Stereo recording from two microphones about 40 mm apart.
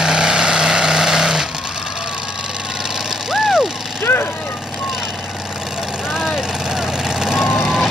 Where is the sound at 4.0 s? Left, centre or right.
Left.